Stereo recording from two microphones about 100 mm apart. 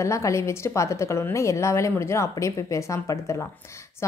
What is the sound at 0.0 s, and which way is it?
A woman's voice, 30° left (ahead or behind).